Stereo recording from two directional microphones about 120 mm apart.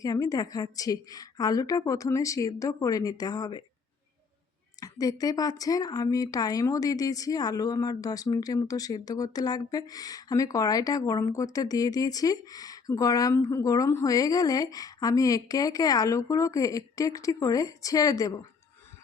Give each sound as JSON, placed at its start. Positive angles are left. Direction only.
{"t": 0.0, "sound": "a woman's voice", "side_deg": 30}
{"t": 4.8, "sound": "a woman's voice", "side_deg": 30}